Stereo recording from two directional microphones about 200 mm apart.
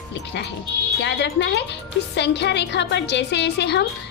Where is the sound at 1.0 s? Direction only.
60° left (ahead or behind).